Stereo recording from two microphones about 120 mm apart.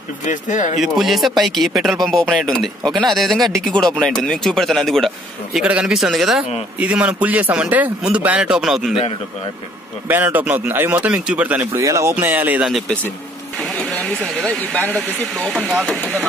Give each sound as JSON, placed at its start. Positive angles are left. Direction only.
{"t": 0.2, "sound": "speech", "side_deg": 90}
{"t": 0.7, "sound": "speech", "side_deg": 0}
{"t": 10.0, "sound": "a man's voice", "side_deg": -15}
{"t": 11.8, "sound": "speech", "side_deg": -25}
{"t": 13.6, "sound": "speech", "side_deg": 5}
{"t": 15.5, "sound": "a man's voice", "side_deg": -10}